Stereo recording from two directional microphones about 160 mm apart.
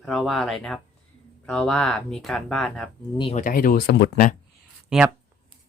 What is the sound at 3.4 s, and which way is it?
Speech, 60° left (ahead or behind).